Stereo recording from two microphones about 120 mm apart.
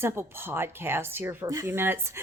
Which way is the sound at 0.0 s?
20° right (ahead or behind).